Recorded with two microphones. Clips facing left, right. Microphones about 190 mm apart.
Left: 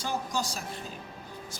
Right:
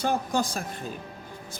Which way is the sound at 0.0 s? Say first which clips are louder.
Right 6 dB; 55° right (ahead or behind).